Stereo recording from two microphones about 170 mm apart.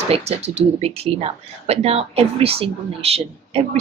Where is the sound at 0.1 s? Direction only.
40° right (ahead or behind).